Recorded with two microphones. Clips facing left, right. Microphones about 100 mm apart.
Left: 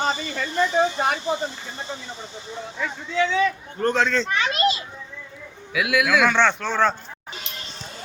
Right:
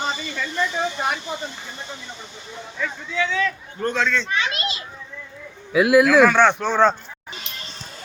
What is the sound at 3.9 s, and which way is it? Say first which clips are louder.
Speech: left 1 dB; 35° left (ahead or behind).